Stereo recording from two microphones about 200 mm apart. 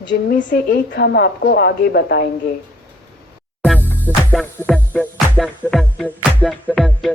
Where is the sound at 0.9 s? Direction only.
55° left (ahead or behind).